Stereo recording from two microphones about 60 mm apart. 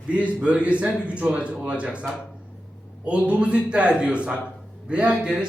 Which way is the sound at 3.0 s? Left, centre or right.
Centre.